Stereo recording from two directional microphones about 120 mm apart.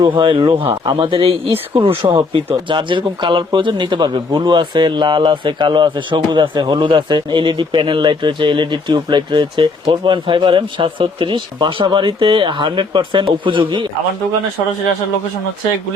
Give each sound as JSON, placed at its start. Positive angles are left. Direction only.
{"t": 0.1, "sound": "speech", "side_deg": -45}